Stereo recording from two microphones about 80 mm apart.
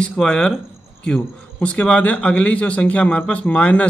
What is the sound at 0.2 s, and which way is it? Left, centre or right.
Speech, centre.